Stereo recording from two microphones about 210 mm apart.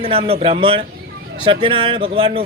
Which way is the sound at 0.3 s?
25° right (ahead or behind).